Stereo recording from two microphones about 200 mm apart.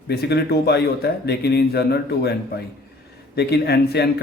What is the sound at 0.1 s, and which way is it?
Speech, 55° left (ahead or behind).